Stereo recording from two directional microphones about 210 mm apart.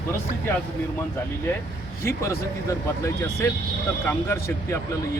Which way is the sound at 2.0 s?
15° left (ahead or behind).